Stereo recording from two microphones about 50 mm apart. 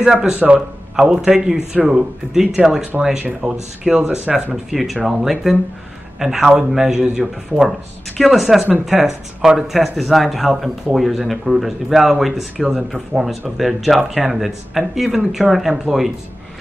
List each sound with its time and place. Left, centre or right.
0.0 s speech: centre
4.6 s a man's voice: centre